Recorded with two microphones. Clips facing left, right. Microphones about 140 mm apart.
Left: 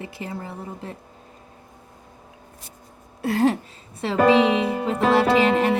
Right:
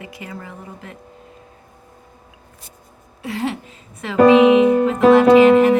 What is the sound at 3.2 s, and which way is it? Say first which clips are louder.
Speech: left 5 dB; 45° left (ahead or behind).